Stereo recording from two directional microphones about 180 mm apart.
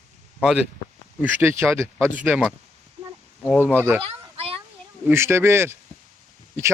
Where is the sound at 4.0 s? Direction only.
30° right (ahead or behind).